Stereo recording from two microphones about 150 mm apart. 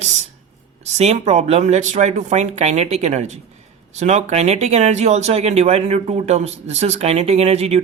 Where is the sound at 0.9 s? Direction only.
45° right (ahead or behind).